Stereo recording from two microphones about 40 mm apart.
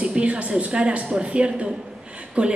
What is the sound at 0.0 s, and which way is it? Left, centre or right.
A woman's voice, right.